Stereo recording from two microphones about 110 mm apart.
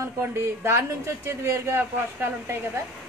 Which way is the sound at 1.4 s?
25° right (ahead or behind).